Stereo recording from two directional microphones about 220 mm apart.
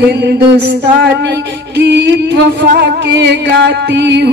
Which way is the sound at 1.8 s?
50° right (ahead or behind).